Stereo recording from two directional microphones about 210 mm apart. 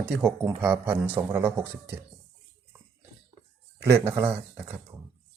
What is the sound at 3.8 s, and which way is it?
Speech, 10° right (ahead or behind).